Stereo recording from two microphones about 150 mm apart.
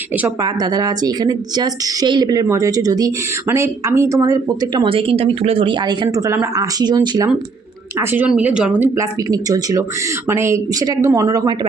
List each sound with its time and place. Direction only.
0.4 s speech: 25° right (ahead or behind)
7.9 s speech: 10° right (ahead or behind)
9.0 s speech: 25° right (ahead or behind)